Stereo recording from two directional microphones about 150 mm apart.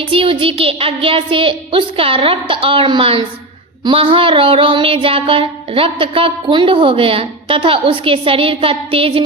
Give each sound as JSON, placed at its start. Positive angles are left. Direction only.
{"t": 0.0, "sound": "child singing", "side_deg": -35}